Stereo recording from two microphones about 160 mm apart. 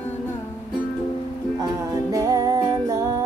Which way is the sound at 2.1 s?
25° right (ahead or behind).